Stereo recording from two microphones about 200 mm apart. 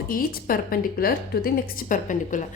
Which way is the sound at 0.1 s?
45° left (ahead or behind).